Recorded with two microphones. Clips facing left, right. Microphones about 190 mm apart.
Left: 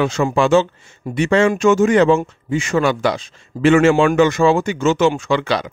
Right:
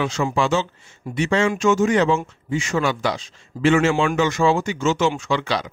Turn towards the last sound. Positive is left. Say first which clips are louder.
# left 4 dB
turn(degrees=55)  # may be behind; listen again after turning